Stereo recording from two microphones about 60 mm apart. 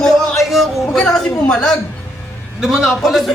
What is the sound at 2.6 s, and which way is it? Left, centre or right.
Speech, centre.